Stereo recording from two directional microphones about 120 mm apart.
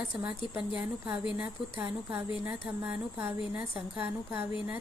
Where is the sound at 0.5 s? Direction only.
10° right (ahead or behind).